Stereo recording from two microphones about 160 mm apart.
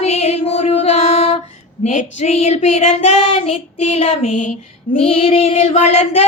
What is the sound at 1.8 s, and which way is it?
Child singing, 45° left (ahead or behind).